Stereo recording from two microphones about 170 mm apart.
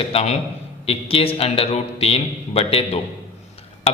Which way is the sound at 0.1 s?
35° left (ahead or behind).